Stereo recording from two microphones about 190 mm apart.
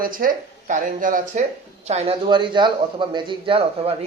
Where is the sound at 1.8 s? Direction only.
30° right (ahead or behind).